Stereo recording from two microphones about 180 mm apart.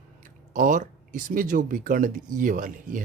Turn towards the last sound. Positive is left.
turn(degrees=-50)  # may be behind; listen again after turning